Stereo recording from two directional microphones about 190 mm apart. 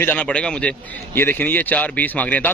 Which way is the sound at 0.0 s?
10° left (ahead or behind).